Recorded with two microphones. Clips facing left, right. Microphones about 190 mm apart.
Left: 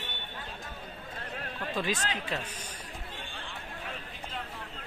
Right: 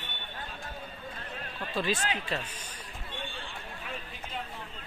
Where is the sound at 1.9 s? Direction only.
10° right (ahead or behind).